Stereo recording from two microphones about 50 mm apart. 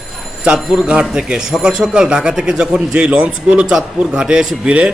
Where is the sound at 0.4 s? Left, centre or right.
Centre.